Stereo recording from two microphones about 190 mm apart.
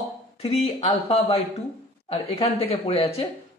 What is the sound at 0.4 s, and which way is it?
Speech, 30° left (ahead or behind).